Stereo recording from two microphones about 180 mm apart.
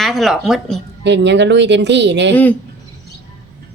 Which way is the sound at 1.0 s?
75° right (ahead or behind).